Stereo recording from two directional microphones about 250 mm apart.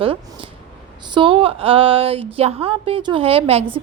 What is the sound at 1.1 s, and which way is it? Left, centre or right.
A woman's voice, right.